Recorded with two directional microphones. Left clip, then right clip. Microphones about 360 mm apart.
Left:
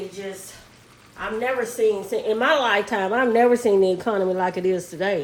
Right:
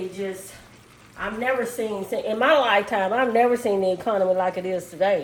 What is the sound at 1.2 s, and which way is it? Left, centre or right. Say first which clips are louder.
A woman's voice: even; left.